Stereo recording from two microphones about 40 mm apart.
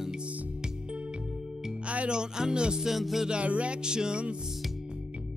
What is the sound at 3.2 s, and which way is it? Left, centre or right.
Music, right.